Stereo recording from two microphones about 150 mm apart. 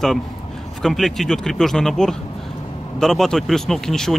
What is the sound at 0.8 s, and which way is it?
Speech, centre (ahead or behind).